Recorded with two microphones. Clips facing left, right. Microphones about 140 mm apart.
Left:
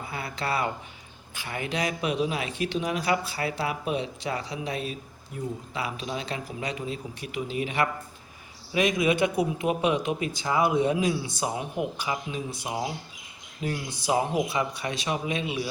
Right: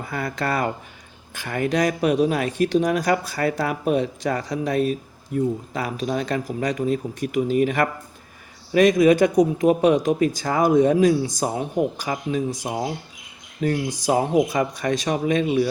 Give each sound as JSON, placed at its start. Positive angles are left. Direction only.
{"t": 0.1, "sound": "a man's voice", "side_deg": -45}
{"t": 14.0, "sound": "a man's voice", "side_deg": -45}